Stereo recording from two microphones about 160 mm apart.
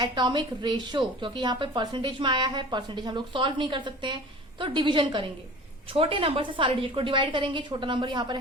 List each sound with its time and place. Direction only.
0.0 s a woman's voice: 30° right (ahead or behind)